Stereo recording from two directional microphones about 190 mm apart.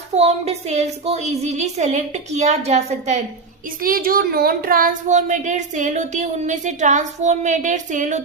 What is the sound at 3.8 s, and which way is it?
Speech, 50° right (ahead or behind).